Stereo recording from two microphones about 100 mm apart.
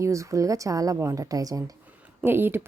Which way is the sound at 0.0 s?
30° right (ahead or behind).